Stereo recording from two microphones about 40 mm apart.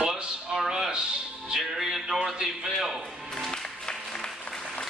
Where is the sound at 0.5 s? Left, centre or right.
Centre.